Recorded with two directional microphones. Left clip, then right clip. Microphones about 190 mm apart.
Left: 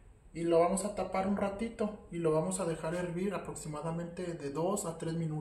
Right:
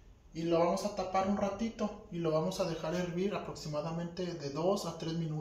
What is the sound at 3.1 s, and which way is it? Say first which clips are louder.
Speech: right 1 dB; 30° left (ahead or behind).